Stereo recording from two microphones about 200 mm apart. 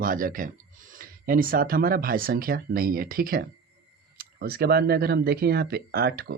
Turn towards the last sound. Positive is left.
turn(degrees=-50)  # may be behind; listen again after turning